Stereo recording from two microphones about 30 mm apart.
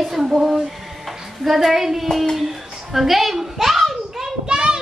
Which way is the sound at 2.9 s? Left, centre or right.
Centre.